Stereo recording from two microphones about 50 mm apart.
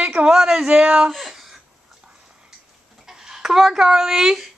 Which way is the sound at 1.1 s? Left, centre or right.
Centre.